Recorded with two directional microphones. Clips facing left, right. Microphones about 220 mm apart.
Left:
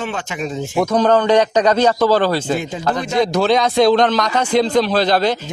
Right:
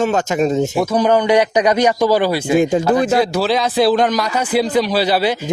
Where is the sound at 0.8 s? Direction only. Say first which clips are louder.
Left 4 dB; 10° right (ahead or behind).